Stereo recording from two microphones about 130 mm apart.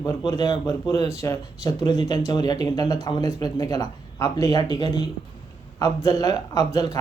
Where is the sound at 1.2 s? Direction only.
25° left (ahead or behind).